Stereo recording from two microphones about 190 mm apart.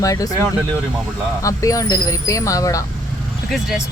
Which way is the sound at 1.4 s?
15° left (ahead or behind).